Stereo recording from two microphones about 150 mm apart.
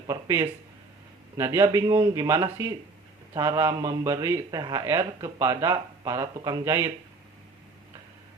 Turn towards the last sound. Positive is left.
turn(degrees=-20)  # may be behind; listen again after turning